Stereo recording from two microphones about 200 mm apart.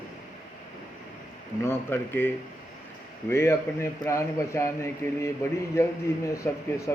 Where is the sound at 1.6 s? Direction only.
10° left (ahead or behind).